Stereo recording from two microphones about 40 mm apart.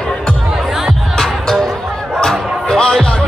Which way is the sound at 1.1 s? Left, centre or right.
Centre.